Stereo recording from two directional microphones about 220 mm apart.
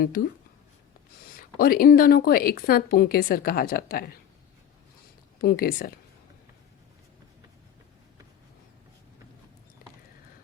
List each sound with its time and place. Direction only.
1.5 s a woman's voice: 40° left (ahead or behind)
5.4 s a woman's voice: 40° left (ahead or behind)